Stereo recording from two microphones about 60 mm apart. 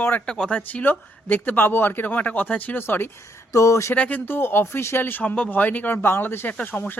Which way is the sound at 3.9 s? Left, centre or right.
Left.